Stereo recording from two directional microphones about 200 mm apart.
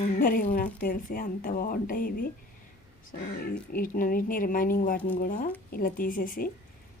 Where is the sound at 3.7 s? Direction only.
45° left (ahead or behind).